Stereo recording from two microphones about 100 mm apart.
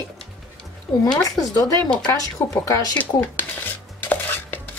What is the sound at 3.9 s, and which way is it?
Chopping, 20° left (ahead or behind).